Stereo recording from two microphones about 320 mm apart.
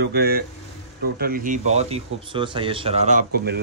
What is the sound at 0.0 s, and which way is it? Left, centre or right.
Speech, right.